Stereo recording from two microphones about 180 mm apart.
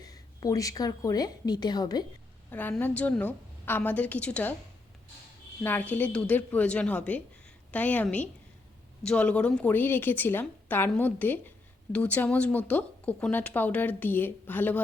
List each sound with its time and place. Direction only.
0.0 s a woman's voice: 20° left (ahead or behind)
2.5 s a woman's voice: 10° left (ahead or behind)
5.6 s a woman's voice: 10° left (ahead or behind)